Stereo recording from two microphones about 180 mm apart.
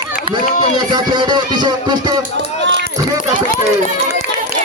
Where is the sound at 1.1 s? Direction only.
25° right (ahead or behind).